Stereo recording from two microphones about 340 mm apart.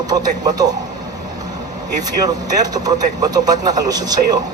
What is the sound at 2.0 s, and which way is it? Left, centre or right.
A man's voice, centre.